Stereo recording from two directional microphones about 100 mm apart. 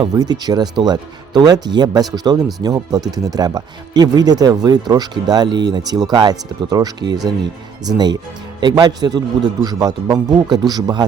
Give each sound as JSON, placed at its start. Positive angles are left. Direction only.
{"t": 0.1, "sound": "speech", "side_deg": -40}